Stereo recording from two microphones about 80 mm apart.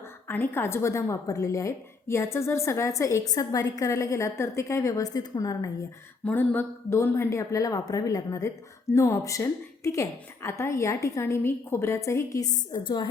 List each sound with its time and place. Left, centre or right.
0.3 s a woman's voice: left
6.2 s a sound: left
6.9 s a woman's voice: left